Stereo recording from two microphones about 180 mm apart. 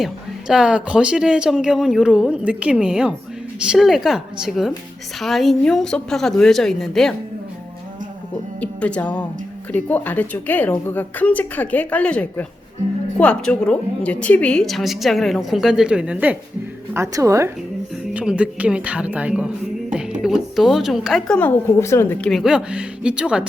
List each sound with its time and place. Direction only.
0.0 s a woman's voice: 5° right (ahead or behind)
8.6 s a woman's voice: 5° left (ahead or behind)